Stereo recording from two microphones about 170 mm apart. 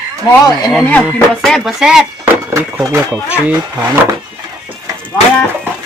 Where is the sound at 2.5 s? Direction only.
15° right (ahead or behind).